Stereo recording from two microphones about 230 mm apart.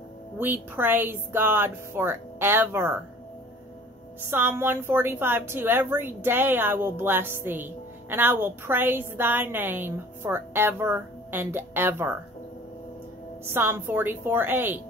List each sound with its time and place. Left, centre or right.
0.4 s a woman's voice: centre
4.3 s a woman's voice: centre
13.5 s a woman's voice: centre